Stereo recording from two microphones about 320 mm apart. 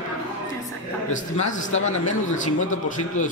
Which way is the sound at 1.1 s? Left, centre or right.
Left.